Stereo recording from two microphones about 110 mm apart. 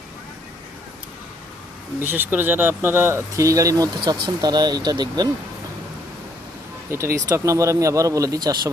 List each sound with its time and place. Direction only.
2.0 s speech: 20° right (ahead or behind); by 5.3 s 35° right (ahead or behind)
6.9 s speech: 25° right (ahead or behind)